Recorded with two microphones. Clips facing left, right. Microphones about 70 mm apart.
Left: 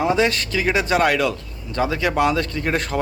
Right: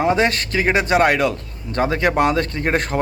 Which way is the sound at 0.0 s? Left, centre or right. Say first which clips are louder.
Right 1 dB; right.